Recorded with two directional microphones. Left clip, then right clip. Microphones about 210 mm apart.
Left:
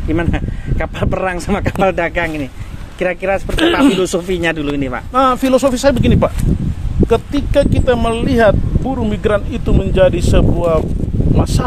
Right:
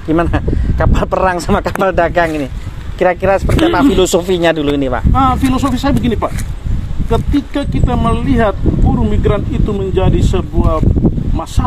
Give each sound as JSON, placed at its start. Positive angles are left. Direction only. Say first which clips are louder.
{"t": 0.1, "sound": "speech", "louder": "right 5 dB", "side_deg": -15}
{"t": 5.1, "sound": "speech", "louder": "left 3 dB", "side_deg": 55}